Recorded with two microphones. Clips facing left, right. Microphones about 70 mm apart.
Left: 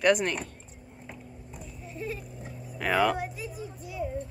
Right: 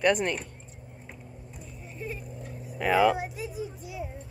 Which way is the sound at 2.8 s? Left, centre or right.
Centre.